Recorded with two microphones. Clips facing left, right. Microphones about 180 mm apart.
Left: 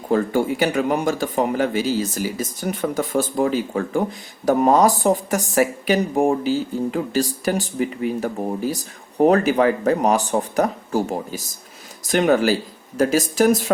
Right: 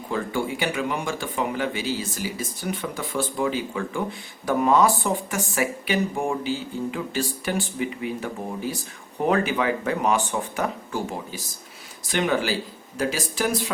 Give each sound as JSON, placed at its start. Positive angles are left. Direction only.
{"t": 0.1, "sound": "speech", "side_deg": 45}